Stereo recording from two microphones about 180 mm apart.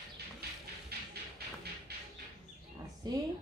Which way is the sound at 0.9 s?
60° right (ahead or behind).